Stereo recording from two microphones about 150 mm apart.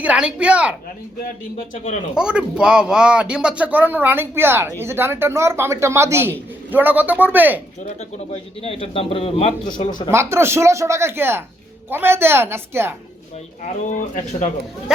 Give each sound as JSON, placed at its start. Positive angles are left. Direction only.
{"t": 0.0, "sound": "speech", "side_deg": -5}
{"t": 1.7, "sound": "speech", "side_deg": 55}
{"t": 2.1, "sound": "speech", "side_deg": -5}
{"t": 8.3, "sound": "a man's voice", "side_deg": 40}
{"t": 10.1, "sound": "speech", "side_deg": -15}
{"t": 13.8, "sound": "speech", "side_deg": 55}